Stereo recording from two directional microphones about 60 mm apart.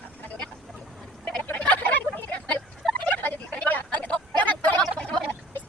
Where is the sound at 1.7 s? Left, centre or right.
Left.